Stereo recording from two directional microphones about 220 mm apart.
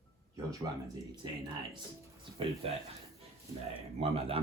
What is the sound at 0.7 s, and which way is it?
Speech, 15° right (ahead or behind).